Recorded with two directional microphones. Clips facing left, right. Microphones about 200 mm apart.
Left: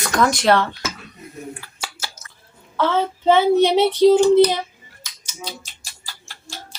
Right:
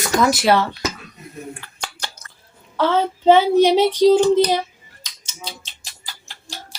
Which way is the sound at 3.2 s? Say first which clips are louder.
Right 2 dB; 15° right (ahead or behind).